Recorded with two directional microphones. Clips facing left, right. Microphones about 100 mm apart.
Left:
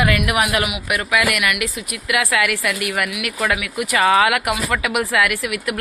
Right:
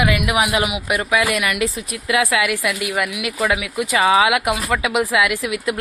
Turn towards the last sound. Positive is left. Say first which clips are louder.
# right 1 dB
turn(degrees=-25)  # may be behind; listen again after turning